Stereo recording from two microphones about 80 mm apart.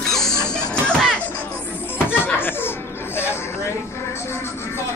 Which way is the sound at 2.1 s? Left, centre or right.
Left.